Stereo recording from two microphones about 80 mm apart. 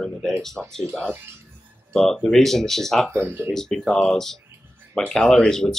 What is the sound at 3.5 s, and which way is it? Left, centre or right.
Speech, centre.